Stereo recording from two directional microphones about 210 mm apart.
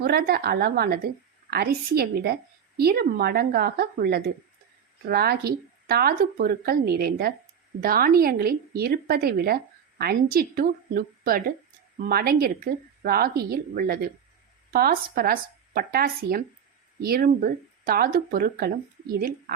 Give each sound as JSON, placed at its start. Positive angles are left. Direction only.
{"t": 0.0, "sound": "a woman's voice", "side_deg": -45}